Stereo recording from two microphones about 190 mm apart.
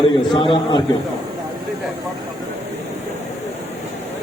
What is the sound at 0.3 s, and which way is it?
Speech, 25° left (ahead or behind).